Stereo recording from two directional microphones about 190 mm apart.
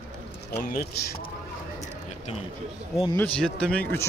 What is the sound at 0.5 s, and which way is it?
Speech, 60° left (ahead or behind).